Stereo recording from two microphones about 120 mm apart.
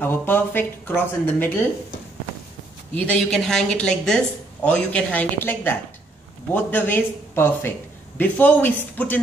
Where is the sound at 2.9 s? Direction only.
10° left (ahead or behind).